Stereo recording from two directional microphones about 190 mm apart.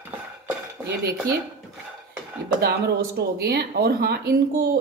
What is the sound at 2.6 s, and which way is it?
Speech, 55° right (ahead or behind).